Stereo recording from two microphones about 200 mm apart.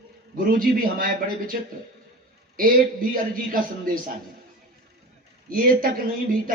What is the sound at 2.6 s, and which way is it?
A man's voice, 45° right (ahead or behind).